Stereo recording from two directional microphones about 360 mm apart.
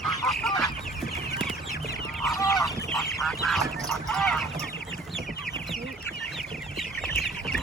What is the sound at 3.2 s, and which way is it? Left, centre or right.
Duck, centre.